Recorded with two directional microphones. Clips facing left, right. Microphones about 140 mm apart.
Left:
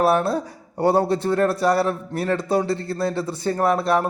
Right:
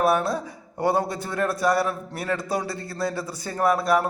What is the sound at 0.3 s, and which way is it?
A man's voice, 30° left (ahead or behind).